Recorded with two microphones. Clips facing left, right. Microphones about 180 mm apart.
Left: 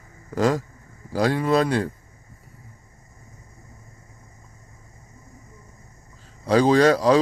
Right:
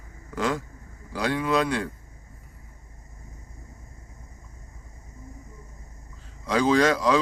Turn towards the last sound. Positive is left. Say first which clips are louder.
# left 4 dB
turn(degrees=35)  # may be behind; listen again after turning